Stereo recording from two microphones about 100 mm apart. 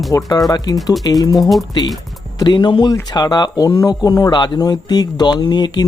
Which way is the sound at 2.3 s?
45° left (ahead or behind).